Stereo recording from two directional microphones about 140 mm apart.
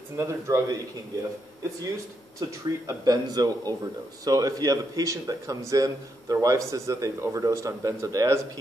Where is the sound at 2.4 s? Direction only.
25° right (ahead or behind).